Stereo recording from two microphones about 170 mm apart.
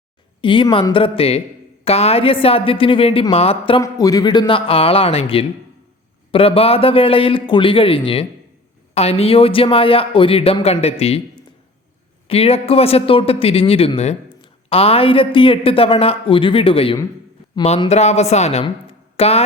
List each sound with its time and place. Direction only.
0.4 s speech: 30° left (ahead or behind)
3.8 s speech: 20° left (ahead or behind); by 18.6 s 40° left (ahead or behind)
18.6 s a sound: 35° left (ahead or behind)